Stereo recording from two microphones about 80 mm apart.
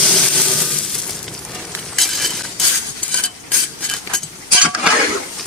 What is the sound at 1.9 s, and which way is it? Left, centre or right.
Cutlery, centre.